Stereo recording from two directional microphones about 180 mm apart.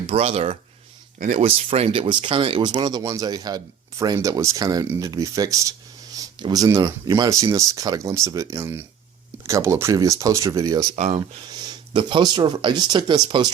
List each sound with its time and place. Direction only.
0.1 s speech: 35° right (ahead or behind); by 10.8 s 20° right (ahead or behind)
10.9 s speech: 35° right (ahead or behind)
11.5 s speech: 25° right (ahead or behind)